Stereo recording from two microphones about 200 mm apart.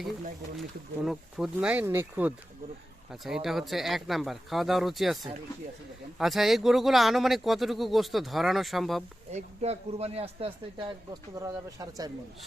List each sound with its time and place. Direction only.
1.0 s speech: centre (ahead or behind)
9.3 s speech: 35° right (ahead or behind)